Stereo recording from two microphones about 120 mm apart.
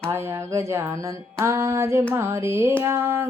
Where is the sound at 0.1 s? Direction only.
20° right (ahead or behind).